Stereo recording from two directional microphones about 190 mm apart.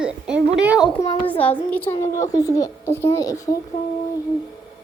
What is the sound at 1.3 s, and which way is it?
A child's voice, 10° left (ahead or behind).